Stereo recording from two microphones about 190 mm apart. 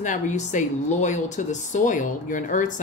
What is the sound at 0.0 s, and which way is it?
Speech, 40° left (ahead or behind).